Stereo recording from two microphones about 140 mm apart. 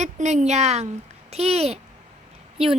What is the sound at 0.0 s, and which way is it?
A woman's voice, 55° right (ahead or behind).